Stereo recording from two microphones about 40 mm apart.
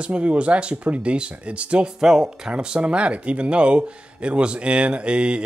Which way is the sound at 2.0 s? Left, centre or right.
Centre.